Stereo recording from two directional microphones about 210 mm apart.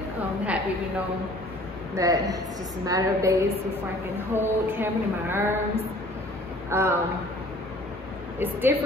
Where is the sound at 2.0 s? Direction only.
15° right (ahead or behind).